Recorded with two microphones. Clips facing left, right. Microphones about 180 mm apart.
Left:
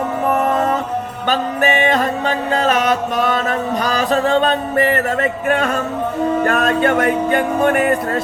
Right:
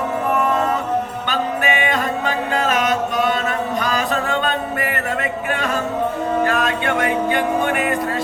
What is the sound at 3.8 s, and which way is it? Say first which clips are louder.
Music: left 4 dB; 40° left (ahead or behind).